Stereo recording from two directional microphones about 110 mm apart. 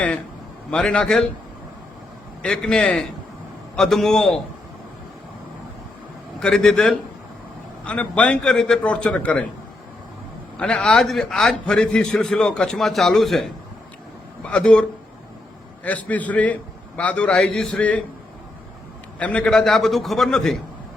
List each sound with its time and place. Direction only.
0.7 s a man's voice: 10° left (ahead or behind)
2.4 s a man's voice: 10° left (ahead or behind)
6.4 s a man's voice: 5° left (ahead or behind)
10.6 s a man's voice: 10° left (ahead or behind)
14.4 s a man's voice: 10° left (ahead or behind)
19.2 s a man's voice: 10° left (ahead or behind)